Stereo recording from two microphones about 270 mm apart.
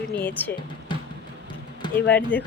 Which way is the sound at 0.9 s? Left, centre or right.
Centre.